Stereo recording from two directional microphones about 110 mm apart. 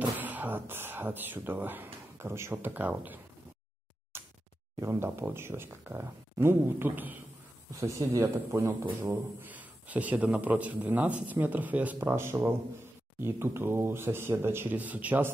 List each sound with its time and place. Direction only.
0.2 s speech: 15° right (ahead or behind)
4.1 s music: 25° right (ahead or behind)
4.7 s speech: 25° right (ahead or behind)
9.4 s a man's voice: 15° right (ahead or behind)